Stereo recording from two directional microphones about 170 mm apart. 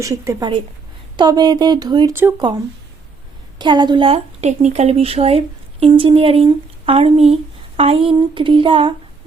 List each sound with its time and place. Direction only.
0.0 s speech: 20° right (ahead or behind)
3.6 s speech: 25° right (ahead or behind)